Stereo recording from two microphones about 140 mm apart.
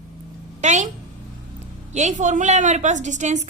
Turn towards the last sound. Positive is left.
turn(degrees=-60)  # may be behind; listen again after turning